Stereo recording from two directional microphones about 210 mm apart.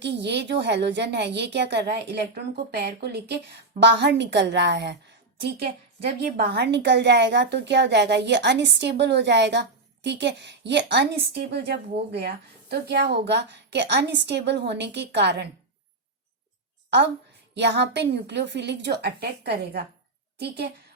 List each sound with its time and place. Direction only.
0.0 s a woman's voice: 55° right (ahead or behind)
17.5 s a woman's voice: 55° right (ahead or behind)